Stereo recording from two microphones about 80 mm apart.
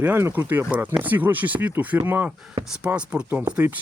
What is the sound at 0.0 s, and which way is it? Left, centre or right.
Speech, right.